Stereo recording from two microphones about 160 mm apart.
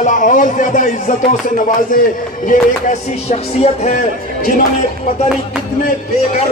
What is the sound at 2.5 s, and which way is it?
Music, 45° left (ahead or behind).